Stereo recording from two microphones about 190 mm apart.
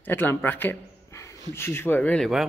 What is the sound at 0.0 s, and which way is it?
A man's voice, 10° left (ahead or behind).